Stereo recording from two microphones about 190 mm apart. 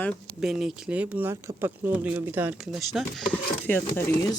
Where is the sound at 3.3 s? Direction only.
10° left (ahead or behind).